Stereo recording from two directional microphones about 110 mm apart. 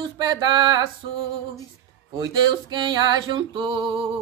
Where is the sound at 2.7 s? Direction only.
40° right (ahead or behind).